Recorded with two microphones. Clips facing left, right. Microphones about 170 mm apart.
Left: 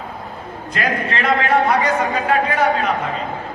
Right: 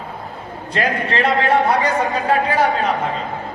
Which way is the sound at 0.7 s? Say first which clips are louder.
Right 1 dB; 30° right (ahead or behind).